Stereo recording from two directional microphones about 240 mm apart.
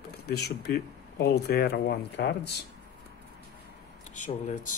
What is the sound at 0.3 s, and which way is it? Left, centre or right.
Speech, left.